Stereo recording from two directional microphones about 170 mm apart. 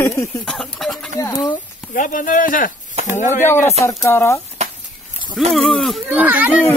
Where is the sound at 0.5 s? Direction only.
Centre (ahead or behind).